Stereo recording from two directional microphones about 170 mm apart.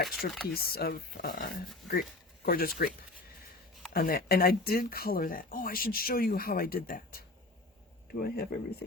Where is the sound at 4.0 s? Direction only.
60° left (ahead or behind).